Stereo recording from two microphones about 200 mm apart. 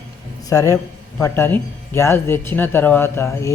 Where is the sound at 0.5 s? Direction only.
15° left (ahead or behind).